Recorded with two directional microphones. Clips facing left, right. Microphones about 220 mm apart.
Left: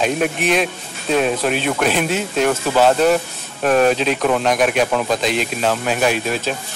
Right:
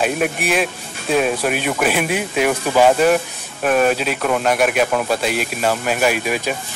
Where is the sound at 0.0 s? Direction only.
5° right (ahead or behind).